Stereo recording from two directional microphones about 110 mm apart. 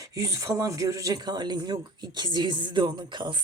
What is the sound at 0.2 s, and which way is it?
Speech, 30° right (ahead or behind).